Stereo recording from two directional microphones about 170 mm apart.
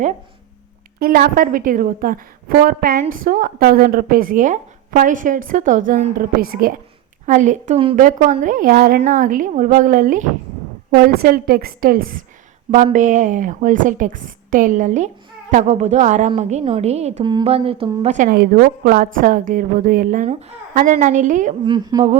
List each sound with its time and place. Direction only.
0.9 s a woman's voice: 65° right (ahead or behind)
7.3 s a woman's voice: 45° right (ahead or behind)
10.9 s a woman's voice: 60° right (ahead or behind); by 17.8 s 35° right (ahead or behind)
18.0 s a woman's voice: 45° right (ahead or behind)
18.9 s a woman's voice: 55° right (ahead or behind)
21.7 s speech: 25° right (ahead or behind)